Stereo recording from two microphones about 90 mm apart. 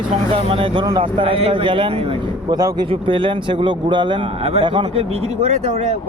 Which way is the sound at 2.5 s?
45° right (ahead or behind).